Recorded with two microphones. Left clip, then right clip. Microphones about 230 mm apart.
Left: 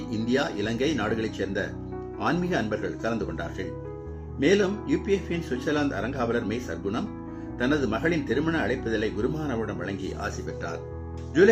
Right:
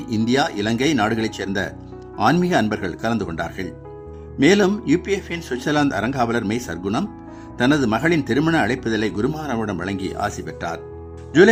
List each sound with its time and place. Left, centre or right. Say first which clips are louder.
0.1 s a man's voice: right 7 dB; right